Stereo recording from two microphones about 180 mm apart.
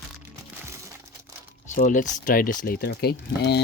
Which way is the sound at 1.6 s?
45° left (ahead or behind).